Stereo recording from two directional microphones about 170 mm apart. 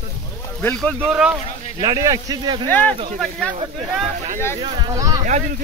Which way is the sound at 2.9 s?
35° right (ahead or behind).